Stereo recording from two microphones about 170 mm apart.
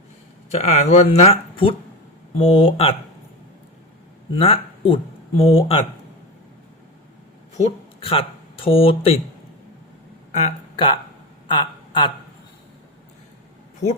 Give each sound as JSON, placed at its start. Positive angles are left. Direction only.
{"t": 0.5, "sound": "speech", "side_deg": 40}
{"t": 4.4, "sound": "speech", "side_deg": 35}
{"t": 8.0, "sound": "speech", "side_deg": 35}
{"t": 10.3, "sound": "speech", "side_deg": 35}
{"t": 11.4, "sound": "a sound", "side_deg": 30}